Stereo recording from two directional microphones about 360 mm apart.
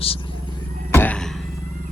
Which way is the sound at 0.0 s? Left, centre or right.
Centre.